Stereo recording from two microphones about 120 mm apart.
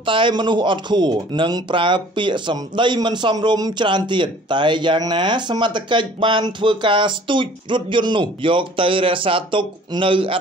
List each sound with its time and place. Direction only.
0.0 s a man's voice: 45° right (ahead or behind)